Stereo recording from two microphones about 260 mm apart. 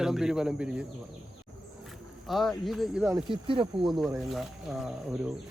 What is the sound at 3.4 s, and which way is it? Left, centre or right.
Speech, centre.